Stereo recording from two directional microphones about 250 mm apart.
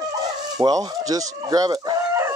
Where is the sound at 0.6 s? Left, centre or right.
Centre.